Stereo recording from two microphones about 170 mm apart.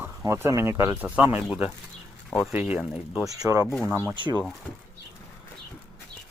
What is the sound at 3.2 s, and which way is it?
Speech, 20° right (ahead or behind).